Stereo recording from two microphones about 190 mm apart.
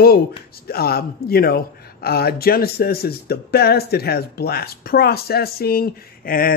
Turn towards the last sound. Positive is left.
turn(degrees=50)  # may be behind; listen again after turning